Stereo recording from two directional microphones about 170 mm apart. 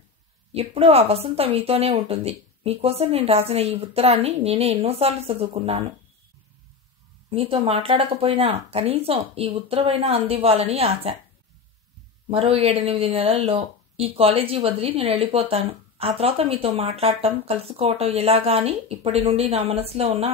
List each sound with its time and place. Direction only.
0.5 s speech: 35° right (ahead or behind)
7.2 s speech: 35° right (ahead or behind)
12.3 s speech: 35° right (ahead or behind)